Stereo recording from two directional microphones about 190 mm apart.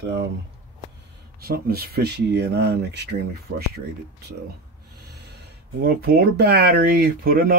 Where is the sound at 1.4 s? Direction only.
55° right (ahead or behind).